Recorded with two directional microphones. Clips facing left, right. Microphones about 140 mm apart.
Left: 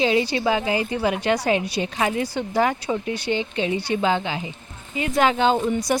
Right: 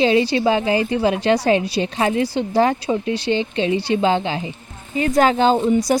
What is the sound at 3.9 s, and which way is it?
A woman's voice, 25° right (ahead or behind).